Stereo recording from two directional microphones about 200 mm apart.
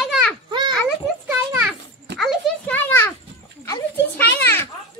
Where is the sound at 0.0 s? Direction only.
Centre (ahead or behind).